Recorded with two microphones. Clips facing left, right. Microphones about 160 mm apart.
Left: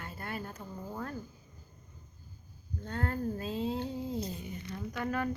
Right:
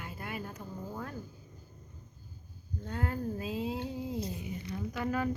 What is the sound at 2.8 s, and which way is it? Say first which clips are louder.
Speech: left 1 dB; 5° right (ahead or behind).